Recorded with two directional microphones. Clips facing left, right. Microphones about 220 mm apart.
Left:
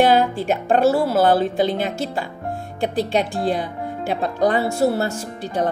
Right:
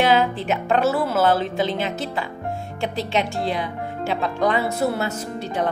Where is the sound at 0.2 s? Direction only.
50° left (ahead or behind).